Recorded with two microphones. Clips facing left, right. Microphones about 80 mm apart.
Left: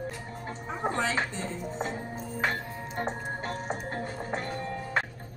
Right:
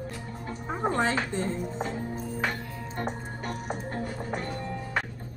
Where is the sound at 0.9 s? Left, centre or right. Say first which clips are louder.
Right 3 dB; right.